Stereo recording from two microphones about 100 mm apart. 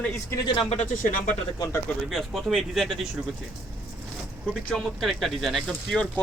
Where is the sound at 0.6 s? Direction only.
90° left.